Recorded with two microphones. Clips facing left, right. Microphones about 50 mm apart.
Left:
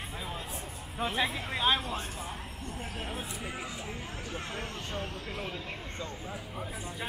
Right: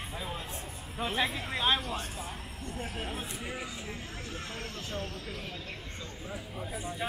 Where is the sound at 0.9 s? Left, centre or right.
Centre.